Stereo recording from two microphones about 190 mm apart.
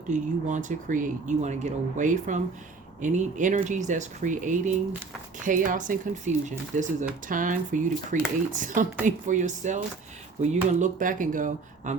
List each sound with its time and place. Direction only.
0.1 s speech: 40° right (ahead or behind)